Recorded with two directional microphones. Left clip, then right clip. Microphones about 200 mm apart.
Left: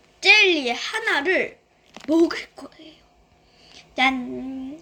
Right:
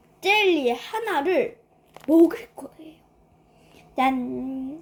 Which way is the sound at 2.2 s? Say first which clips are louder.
Right 1 dB; 5° right (ahead or behind).